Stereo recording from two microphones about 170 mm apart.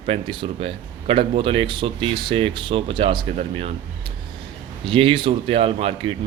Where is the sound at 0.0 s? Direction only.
30° right (ahead or behind).